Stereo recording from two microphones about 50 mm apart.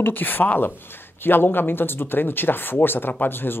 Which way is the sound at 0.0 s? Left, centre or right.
Left.